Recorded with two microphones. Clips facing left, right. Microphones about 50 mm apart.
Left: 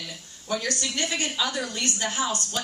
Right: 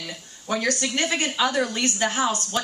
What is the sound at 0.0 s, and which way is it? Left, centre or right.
A woman's voice, right.